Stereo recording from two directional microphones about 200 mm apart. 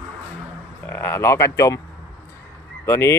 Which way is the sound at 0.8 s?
10° left (ahead or behind).